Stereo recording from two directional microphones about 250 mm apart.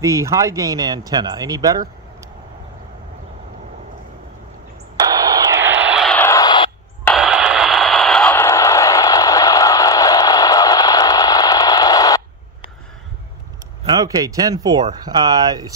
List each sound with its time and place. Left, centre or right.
0.0 s speech: centre
4.9 s a sound: centre
7.1 s radio: centre
13.8 s speech: centre